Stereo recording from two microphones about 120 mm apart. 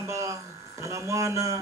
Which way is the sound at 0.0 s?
25° right (ahead or behind).